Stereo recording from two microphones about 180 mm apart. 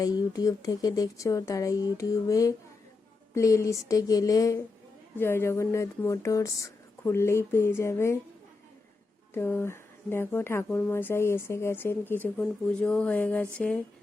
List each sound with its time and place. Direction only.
0.0 s speech: 20° left (ahead or behind)
9.3 s speech: 10° left (ahead or behind)